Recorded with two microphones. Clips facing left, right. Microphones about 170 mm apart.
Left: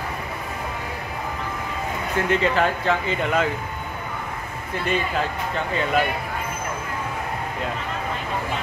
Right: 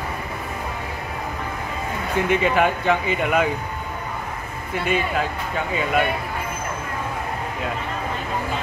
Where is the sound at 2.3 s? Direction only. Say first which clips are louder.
Right 2 dB; 15° right (ahead or behind).